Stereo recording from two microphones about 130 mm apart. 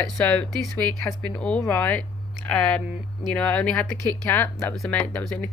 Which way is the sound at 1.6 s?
15° left (ahead or behind).